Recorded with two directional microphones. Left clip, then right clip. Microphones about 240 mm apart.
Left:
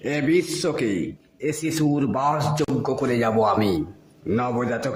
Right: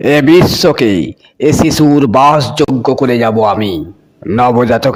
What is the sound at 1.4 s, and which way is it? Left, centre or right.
A man's voice, right.